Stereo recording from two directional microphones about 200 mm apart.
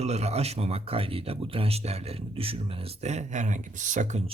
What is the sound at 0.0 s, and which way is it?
Speech, 30° right (ahead or behind).